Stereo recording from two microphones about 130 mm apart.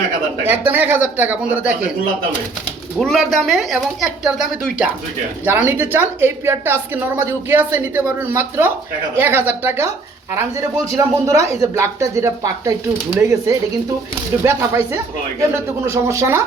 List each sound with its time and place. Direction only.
0.4 s speech: 15° right (ahead or behind)
3.0 s speech: centre (ahead or behind); by 9.9 s 20° right (ahead or behind)
10.9 s speech: 25° right (ahead or behind)
14.4 s speech: 20° right (ahead or behind)